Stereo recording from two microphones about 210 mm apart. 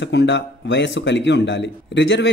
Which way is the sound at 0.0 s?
60° left (ahead or behind).